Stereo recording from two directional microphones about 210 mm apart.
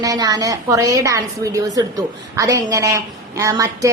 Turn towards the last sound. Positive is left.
turn(degrees=-15)  # may be behind; listen again after turning